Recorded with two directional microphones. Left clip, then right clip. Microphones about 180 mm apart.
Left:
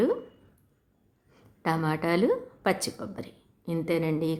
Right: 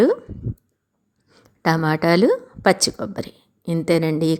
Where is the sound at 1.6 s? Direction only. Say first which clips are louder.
Right 9 dB; 35° right (ahead or behind).